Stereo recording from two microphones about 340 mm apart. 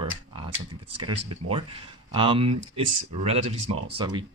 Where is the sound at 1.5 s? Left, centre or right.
Centre.